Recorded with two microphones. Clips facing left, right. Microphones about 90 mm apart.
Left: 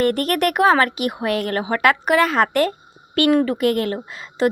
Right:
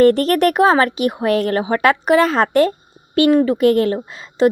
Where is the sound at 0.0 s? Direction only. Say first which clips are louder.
Right 6 dB; 30° right (ahead or behind).